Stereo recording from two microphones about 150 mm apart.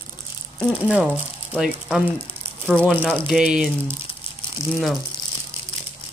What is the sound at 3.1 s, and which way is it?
Speech, 5° right (ahead or behind).